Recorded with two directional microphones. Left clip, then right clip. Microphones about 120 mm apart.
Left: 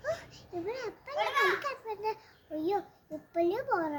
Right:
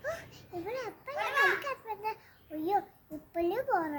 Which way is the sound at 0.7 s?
15° right (ahead or behind).